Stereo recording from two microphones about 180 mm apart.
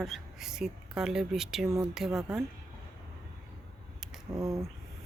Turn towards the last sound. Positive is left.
turn(degrees=-15)  # may be behind; listen again after turning